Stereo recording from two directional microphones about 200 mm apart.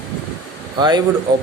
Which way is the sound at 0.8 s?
20° right (ahead or behind).